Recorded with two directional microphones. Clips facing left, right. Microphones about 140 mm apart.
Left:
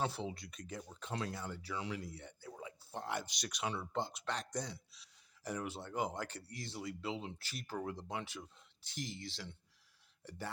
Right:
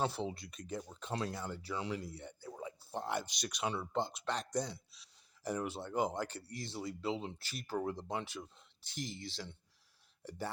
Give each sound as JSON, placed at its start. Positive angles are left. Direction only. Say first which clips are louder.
{"t": 0.0, "sound": "speech", "louder": "right 2 dB", "side_deg": -35}
{"t": 10.2, "sound": "speech", "louder": "right 4 dB", "side_deg": -30}